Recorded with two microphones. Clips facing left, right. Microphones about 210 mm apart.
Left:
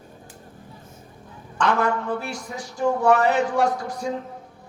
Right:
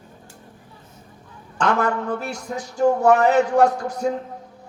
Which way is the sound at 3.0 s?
45° right (ahead or behind).